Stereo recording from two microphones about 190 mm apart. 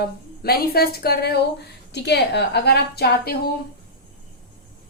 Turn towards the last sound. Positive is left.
turn(degrees=60)  # may be behind; listen again after turning